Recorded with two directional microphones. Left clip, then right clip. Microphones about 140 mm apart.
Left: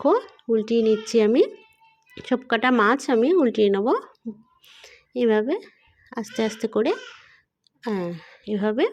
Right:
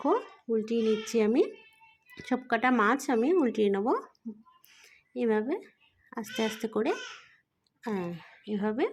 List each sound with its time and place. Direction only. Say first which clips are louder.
0.0 s a woman's voice: left 8 dB; 25° left (ahead or behind)